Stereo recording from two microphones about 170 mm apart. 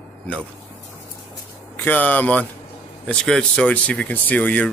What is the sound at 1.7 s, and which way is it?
A man's voice, 10° left (ahead or behind).